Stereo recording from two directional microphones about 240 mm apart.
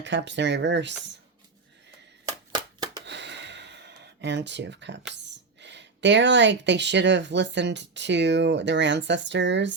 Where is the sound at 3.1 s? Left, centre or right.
Right.